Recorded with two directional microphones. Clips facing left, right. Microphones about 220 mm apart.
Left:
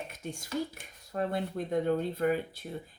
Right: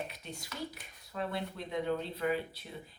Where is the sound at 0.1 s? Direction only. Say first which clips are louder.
Left 9 dB; 45° left (ahead or behind).